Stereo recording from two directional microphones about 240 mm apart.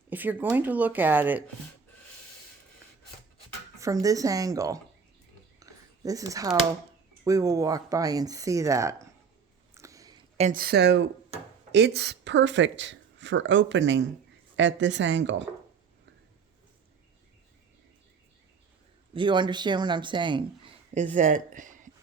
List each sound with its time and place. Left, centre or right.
0.1 s speech: centre
4.0 s speech: centre
5.5 s a sound: centre
7.3 s speech: centre
9.7 s a sound: centre; by 11.1 s right
11.7 s speech: right
19.1 s speech: centre